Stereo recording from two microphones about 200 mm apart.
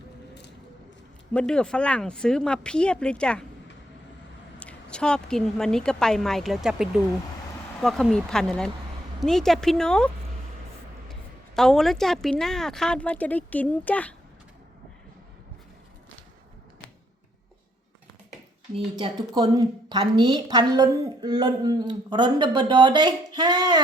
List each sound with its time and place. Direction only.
1.3 s a woman's voice: 5° left (ahead or behind)
4.6 s a woman's voice: 5° left (ahead or behind)
11.1 s a woman's voice: centre (ahead or behind)
18.9 s a woman's voice: 25° right (ahead or behind)